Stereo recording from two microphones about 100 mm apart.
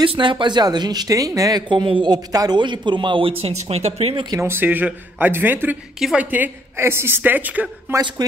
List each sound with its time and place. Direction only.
0.0 s speech: 55° right (ahead or behind); by 1.6 s 35° right (ahead or behind)
1.7 s speech: 55° right (ahead or behind); by 4.1 s 90° right
4.1 s speech: 50° right (ahead or behind)
4.4 s a woman's voice: 20° right (ahead or behind)